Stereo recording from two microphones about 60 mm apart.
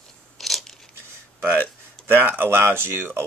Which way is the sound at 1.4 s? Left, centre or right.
Right.